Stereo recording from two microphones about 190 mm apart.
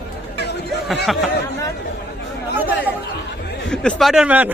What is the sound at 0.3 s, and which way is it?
Chatter, 60° left (ahead or behind).